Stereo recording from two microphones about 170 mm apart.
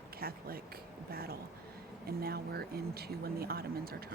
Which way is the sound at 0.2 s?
60° right (ahead or behind).